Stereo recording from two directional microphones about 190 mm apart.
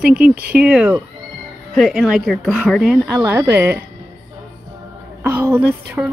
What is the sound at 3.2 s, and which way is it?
Speech, 10° right (ahead or behind).